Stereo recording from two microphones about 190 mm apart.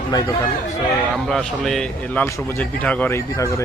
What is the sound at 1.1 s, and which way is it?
A man's voice, 5° left (ahead or behind).